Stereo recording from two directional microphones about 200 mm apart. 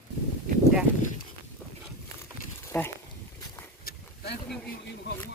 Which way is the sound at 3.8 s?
50° left (ahead or behind).